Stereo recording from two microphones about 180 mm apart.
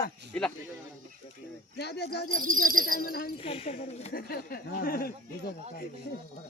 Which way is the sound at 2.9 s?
55° left (ahead or behind).